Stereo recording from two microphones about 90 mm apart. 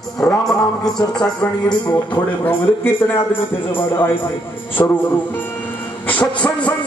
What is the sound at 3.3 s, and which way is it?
Speech, 25° left (ahead or behind).